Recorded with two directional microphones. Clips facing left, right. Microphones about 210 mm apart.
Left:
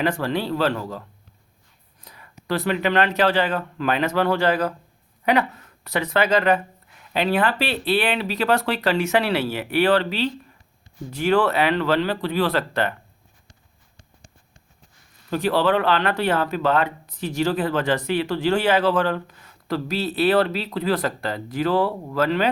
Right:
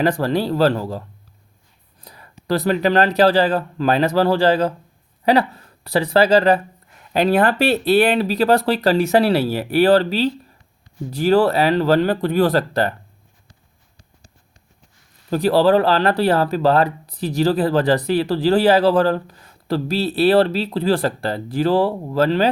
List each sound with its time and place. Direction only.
0.0 s speech: 40° right (ahead or behind)
2.0 s speech: 35° right (ahead or behind)
15.3 s speech: 35° right (ahead or behind)